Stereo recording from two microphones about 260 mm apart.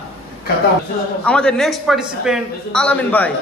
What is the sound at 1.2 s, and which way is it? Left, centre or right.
Speech, centre.